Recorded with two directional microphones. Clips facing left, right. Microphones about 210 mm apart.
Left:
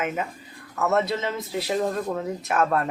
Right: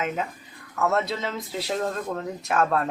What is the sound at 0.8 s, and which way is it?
Speech, centre (ahead or behind).